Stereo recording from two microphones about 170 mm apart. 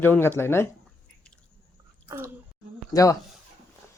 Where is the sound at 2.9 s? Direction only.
20° left (ahead or behind).